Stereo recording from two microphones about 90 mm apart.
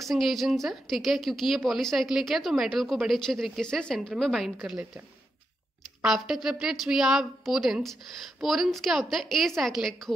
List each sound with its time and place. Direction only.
0.0 s a woman's voice: centre (ahead or behind)
6.0 s a woman's voice: 5° right (ahead or behind)